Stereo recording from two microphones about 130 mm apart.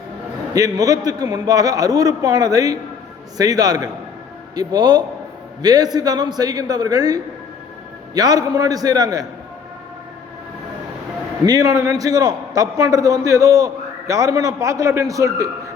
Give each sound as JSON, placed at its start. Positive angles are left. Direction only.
{"t": 0.5, "sound": "a man's voice", "side_deg": -25}
{"t": 11.4, "sound": "a man's voice", "side_deg": -30}